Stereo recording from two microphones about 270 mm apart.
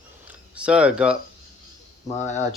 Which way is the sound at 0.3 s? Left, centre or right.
Centre.